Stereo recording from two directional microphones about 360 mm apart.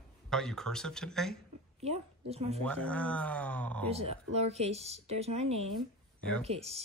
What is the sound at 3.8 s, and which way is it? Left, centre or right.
Speech, centre.